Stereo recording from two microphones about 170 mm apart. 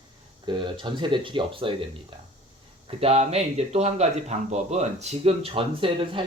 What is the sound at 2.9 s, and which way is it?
Speech, 35° right (ahead or behind).